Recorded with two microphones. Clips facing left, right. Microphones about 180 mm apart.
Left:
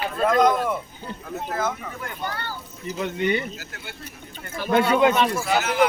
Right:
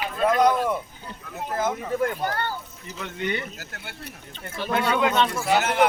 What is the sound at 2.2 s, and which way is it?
Speech, 50° right (ahead or behind).